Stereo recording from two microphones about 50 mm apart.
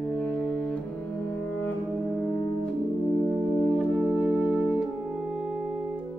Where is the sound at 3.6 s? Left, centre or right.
Right.